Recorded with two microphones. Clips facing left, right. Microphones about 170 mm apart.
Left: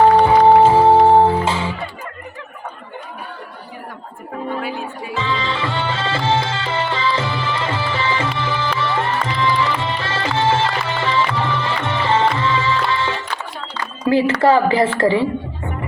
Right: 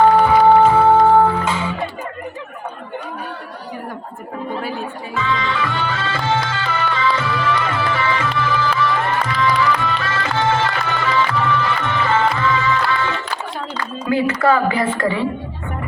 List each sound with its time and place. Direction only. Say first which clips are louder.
0.3 s music: left 1 dB; 30° left (ahead or behind)
5.1 s music: right 1 dB; 30° left (ahead or behind)
14.1 s a woman's voice: left 3 dB; 30° left (ahead or behind)